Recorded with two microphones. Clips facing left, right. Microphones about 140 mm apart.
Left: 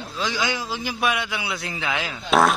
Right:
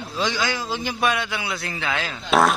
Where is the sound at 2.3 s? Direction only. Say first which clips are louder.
Even; centre (ahead or behind).